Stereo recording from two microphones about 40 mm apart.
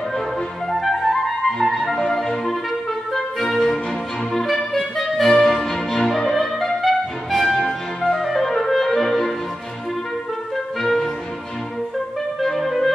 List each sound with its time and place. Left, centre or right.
0.7 s flute: centre
1.8 s music: centre
8.2 s clarinet: centre
10.8 s music: centre
12.4 s clarinet: centre